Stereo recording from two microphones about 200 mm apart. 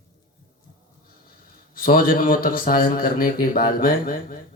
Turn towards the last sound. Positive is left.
turn(degrees=45)  # may be behind; listen again after turning